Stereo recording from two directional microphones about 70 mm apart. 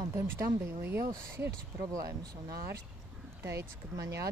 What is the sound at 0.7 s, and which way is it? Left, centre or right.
Speech, right.